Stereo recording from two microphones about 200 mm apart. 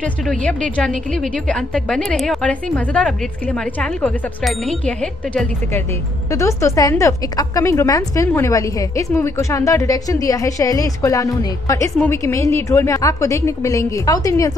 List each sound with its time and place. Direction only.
0.3 s a woman's voice: 5° left (ahead or behind)